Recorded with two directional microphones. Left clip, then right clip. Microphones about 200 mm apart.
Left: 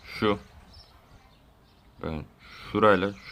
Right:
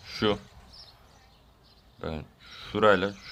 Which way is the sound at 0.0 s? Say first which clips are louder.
Left 1 dB; 5° left (ahead or behind).